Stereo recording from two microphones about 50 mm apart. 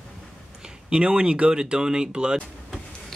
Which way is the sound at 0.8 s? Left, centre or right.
Centre.